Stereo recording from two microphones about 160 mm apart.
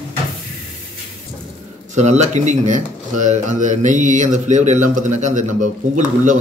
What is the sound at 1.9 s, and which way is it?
Speech, 45° right (ahead or behind).